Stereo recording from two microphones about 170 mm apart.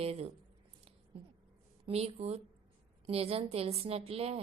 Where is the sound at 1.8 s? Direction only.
35° right (ahead or behind).